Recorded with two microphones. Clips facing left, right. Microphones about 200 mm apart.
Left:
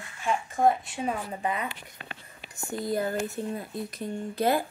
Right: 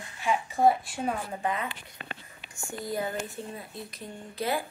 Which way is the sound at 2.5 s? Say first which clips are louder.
Left 4 dB; 60° left (ahead or behind).